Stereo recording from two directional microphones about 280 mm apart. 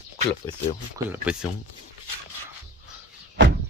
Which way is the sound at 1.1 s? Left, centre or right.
Centre.